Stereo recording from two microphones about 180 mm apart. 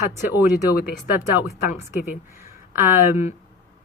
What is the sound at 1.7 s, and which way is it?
Speech, 40° left (ahead or behind).